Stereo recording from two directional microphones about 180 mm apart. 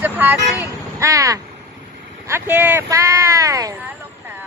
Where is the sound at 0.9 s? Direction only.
15° right (ahead or behind).